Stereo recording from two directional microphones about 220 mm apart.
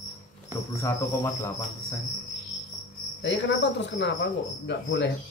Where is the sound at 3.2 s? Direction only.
55° left (ahead or behind).